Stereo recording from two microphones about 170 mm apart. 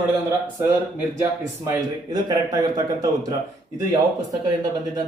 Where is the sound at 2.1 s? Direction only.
25° right (ahead or behind).